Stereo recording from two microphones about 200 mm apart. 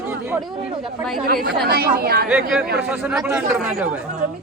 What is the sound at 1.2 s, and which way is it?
Speech, 50° right (ahead or behind).